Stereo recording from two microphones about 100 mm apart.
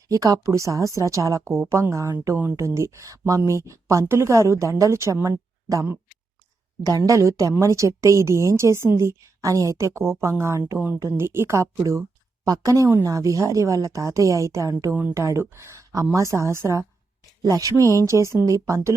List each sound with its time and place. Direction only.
0.1 s a woman's voice: 35° right (ahead or behind)
6.8 s a woman's voice: 35° right (ahead or behind)